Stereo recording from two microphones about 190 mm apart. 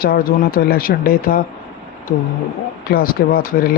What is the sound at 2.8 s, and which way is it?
Speech, 55° left (ahead or behind).